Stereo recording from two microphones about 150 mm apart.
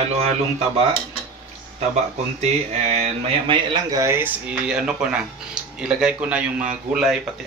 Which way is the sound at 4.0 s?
15° right (ahead or behind).